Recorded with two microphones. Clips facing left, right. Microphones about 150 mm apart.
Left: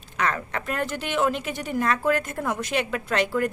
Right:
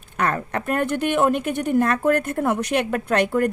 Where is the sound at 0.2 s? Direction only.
55° right (ahead or behind).